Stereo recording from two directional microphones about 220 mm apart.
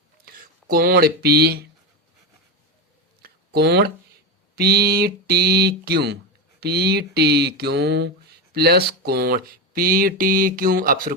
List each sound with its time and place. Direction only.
0.3 s speech: 45° right (ahead or behind)
3.2 s a sound: 45° right (ahead or behind)
4.5 s speech: 45° right (ahead or behind)